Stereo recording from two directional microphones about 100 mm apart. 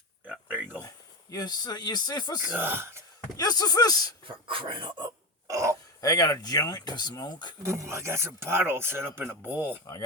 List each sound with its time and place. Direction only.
0.3 s a sound: 15° right (ahead or behind)
0.8 s speech: 35° left (ahead or behind)
2.6 s speech: 25° right (ahead or behind)
3.3 s speech: 40° left (ahead or behind)
4.3 s dog: 60° right (ahead or behind)
5.5 s a sound: 30° right (ahead or behind)
6.0 s speech: 40° left (ahead or behind)
7.6 s speech: 25° right (ahead or behind)